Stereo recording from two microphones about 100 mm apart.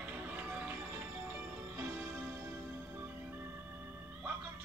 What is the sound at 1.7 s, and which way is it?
Music, 20° right (ahead or behind).